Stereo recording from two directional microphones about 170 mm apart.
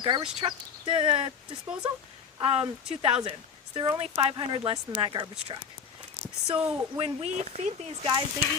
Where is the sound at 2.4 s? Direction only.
35° right (ahead or behind).